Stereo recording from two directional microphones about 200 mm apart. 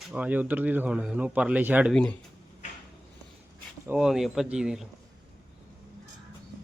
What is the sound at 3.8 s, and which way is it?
Speech, 5° right (ahead or behind).